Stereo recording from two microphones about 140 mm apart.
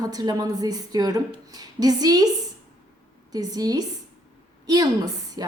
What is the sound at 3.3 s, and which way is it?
A woman's voice, 30° right (ahead or behind).